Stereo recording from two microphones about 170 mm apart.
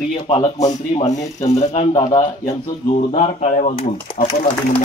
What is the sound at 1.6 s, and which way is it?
Speech, 40° left (ahead or behind).